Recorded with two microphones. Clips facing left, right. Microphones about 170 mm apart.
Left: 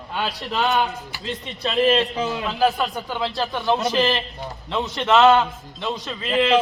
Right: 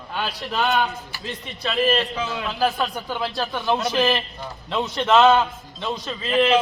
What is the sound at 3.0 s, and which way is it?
Speech, 20° left (ahead or behind).